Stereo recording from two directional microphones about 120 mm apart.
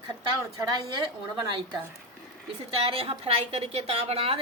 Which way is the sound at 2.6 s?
50° right (ahead or behind).